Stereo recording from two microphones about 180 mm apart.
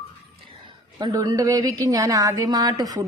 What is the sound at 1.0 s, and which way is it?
Speech, 20° right (ahead or behind).